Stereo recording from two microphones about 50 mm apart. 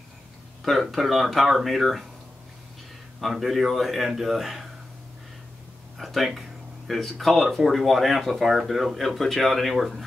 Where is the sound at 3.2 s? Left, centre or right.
Centre.